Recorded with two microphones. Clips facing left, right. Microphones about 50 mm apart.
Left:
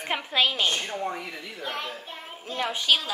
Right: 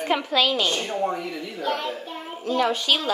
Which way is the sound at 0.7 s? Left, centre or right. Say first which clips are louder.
Right 4 dB; right.